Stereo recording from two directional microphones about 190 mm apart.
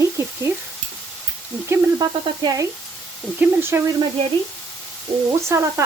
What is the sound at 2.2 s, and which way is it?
Frying, 20° right (ahead or behind).